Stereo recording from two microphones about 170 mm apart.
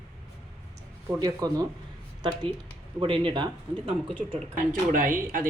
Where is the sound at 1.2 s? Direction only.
20° right (ahead or behind).